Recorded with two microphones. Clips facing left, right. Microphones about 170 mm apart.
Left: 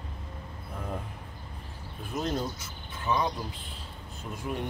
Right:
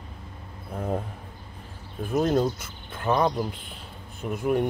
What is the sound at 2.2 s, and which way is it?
Speech, 50° right (ahead or behind).